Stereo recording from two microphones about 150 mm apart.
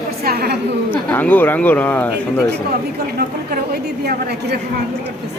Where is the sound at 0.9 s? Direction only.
10° left (ahead or behind).